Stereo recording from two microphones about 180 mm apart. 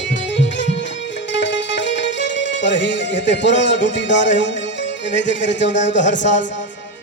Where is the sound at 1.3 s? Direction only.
80° left.